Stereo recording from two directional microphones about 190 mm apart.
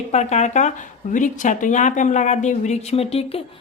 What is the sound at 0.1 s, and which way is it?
A woman's voice, 35° left (ahead or behind).